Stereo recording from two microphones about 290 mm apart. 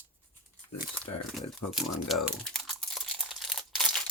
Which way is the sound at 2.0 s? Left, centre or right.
Centre.